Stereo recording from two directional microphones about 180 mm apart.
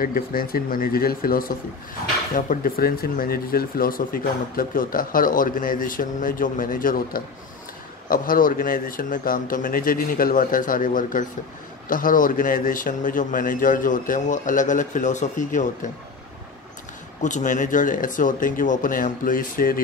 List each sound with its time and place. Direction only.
0.0 s speech: 55° left (ahead or behind)
17.2 s speech: 45° left (ahead or behind)